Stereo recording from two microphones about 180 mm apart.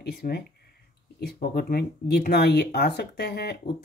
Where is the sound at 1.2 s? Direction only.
60° left (ahead or behind).